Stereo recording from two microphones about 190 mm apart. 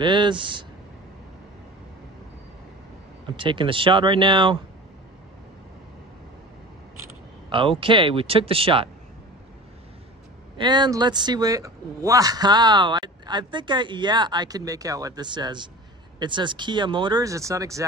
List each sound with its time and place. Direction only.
0.0 s speech: 25° right (ahead or behind)
3.3 s speech: 25° right (ahead or behind)
7.4 s a sound: 25° right (ahead or behind)
7.8 s speech: 25° right (ahead or behind)
10.6 s speech: 20° right (ahead or behind)